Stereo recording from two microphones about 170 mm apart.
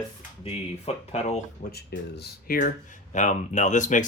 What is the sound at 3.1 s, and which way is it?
Speech, 45° left (ahead or behind).